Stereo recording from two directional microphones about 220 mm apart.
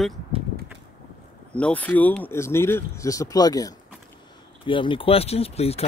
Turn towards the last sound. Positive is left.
turn(degrees=25)  # may be behind; listen again after turning